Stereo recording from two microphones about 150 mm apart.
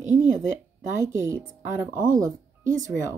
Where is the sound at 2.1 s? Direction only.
25° right (ahead or behind).